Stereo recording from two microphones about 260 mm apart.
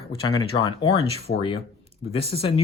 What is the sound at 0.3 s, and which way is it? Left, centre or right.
Speech, centre.